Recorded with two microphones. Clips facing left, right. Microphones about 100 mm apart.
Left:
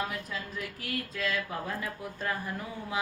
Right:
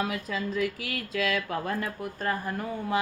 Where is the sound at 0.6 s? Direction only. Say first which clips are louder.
Right 6 dB; 90° right; by 2.3 s 50° right (ahead or behind).